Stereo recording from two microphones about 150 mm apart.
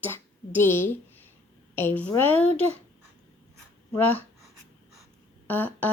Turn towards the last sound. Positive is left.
turn(degrees=10)  # may be behind; listen again after turning